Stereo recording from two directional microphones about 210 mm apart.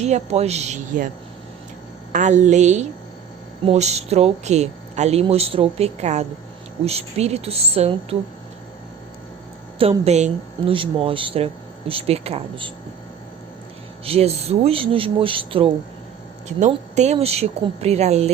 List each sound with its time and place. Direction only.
0.0 s speech: 30° right (ahead or behind)
2.1 s speech: 35° right (ahead or behind)
9.7 s speech: 25° right (ahead or behind)
14.0 s speech: 30° right (ahead or behind)